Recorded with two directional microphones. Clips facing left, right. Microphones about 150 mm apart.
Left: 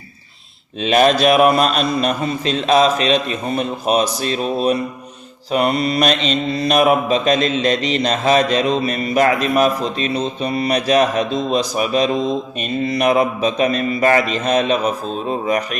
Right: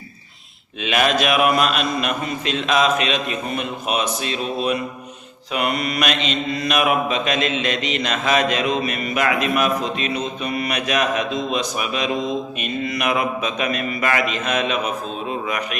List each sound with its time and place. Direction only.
0.8 s mantra: 35° left (ahead or behind)